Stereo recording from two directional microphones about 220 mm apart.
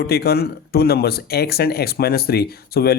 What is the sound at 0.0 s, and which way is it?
Speech, 45° left (ahead or behind).